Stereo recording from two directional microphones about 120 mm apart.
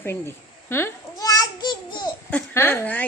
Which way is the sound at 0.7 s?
25° left (ahead or behind).